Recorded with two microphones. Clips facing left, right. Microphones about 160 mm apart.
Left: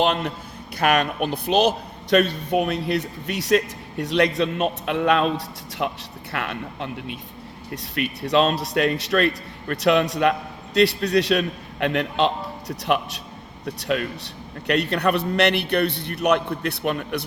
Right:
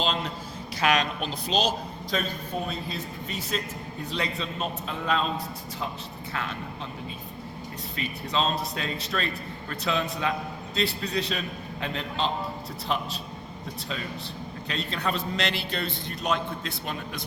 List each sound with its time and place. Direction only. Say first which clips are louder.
0.0 s a man's voice: left 7 dB; 60° left (ahead or behind)